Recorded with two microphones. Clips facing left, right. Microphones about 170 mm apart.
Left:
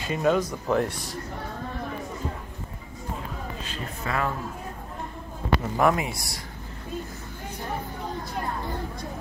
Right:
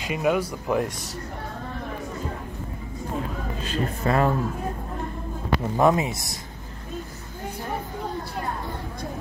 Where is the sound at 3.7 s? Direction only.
40° right (ahead or behind).